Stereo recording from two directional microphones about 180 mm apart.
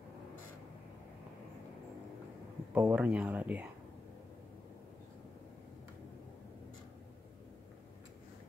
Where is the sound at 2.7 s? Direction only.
10° right (ahead or behind).